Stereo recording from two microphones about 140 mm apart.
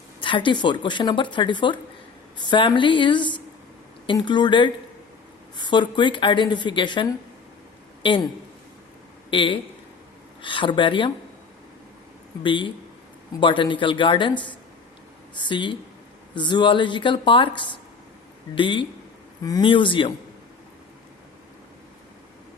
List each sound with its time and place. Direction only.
0.2 s speech: 35° left (ahead or behind)
9.3 s speech: 35° left (ahead or behind)
12.4 s speech: 35° left (ahead or behind)
19.4 s speech: 25° left (ahead or behind)
19.6 s speech: 40° left (ahead or behind)